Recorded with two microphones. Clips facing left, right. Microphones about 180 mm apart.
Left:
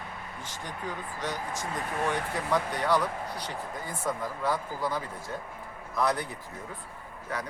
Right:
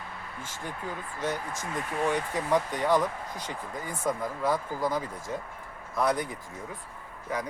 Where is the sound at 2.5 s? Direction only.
15° right (ahead or behind).